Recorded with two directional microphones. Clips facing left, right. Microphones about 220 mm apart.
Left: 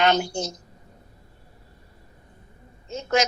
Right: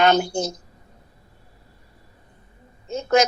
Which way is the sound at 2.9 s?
55° right (ahead or behind).